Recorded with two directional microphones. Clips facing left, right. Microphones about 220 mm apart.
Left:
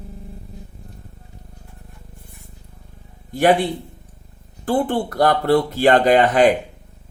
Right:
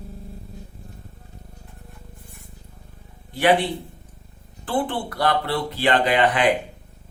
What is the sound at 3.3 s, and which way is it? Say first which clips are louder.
Speech: left 3 dB; 45° left (ahead or behind).